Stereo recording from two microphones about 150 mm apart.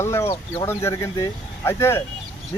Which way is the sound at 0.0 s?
15° left (ahead or behind).